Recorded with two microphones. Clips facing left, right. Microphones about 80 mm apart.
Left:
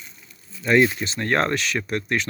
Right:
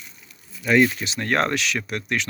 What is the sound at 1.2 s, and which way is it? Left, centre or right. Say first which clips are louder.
Speech: even; centre.